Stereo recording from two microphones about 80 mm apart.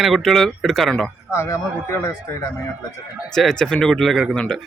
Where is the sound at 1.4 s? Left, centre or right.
Left.